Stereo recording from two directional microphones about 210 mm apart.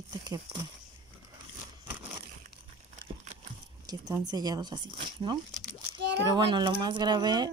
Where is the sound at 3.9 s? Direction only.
20° right (ahead or behind).